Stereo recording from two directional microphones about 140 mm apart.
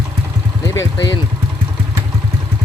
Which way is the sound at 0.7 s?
30° left (ahead or behind).